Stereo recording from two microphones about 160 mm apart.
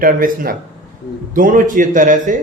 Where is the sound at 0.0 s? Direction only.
60° right (ahead or behind).